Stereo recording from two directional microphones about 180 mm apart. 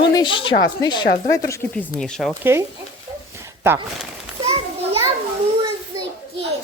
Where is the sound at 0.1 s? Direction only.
25° left (ahead or behind).